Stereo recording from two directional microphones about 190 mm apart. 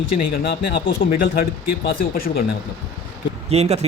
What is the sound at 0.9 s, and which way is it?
Speech, 50° left (ahead or behind).